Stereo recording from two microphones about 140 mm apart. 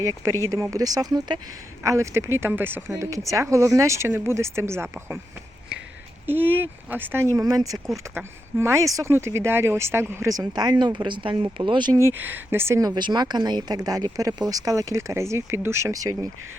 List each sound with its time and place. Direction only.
0.0 s speech: 20° right (ahead or behind)
6.2 s speech: 15° right (ahead or behind)
7.3 s speech: 25° right (ahead or behind)
11.9 s speech: 15° right (ahead or behind)